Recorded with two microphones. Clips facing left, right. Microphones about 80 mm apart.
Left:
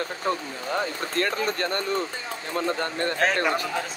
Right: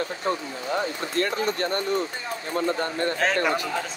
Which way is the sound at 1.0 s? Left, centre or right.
Left.